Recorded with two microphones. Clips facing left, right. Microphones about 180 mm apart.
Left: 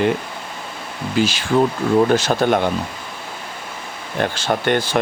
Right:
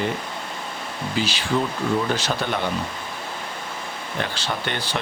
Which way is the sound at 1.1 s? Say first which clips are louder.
Left 7 dB; 50° left (ahead or behind).